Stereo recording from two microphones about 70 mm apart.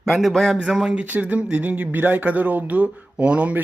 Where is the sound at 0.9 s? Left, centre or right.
Right.